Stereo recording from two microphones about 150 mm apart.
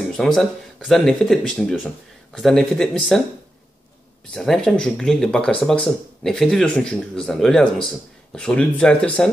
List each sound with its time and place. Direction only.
0.1 s speech: centre (ahead or behind)
4.3 s speech: 5° left (ahead or behind)